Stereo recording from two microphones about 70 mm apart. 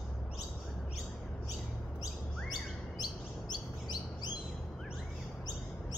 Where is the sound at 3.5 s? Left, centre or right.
Left.